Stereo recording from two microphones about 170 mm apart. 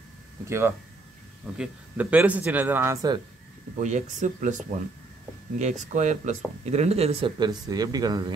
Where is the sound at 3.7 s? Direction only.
45° right (ahead or behind).